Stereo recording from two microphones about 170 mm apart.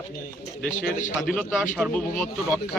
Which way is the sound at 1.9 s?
5° left (ahead or behind).